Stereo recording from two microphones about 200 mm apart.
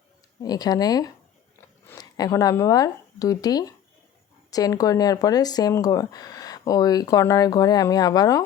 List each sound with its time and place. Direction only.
0.4 s speech: 20° left (ahead or behind)